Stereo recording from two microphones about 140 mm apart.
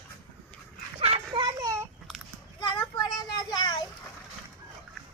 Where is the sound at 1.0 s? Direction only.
40° right (ahead or behind).